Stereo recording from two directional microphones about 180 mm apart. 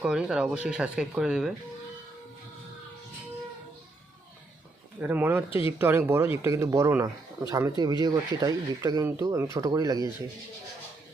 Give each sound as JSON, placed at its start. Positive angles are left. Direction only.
{"t": 0.0, "sound": "speech", "side_deg": -5}
{"t": 4.9, "sound": "speech", "side_deg": -10}
{"t": 5.5, "sound": "speech", "side_deg": 30}
{"t": 5.8, "sound": "speech", "side_deg": -15}